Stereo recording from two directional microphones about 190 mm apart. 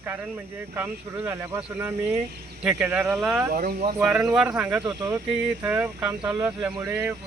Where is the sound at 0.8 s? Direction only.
10° right (ahead or behind).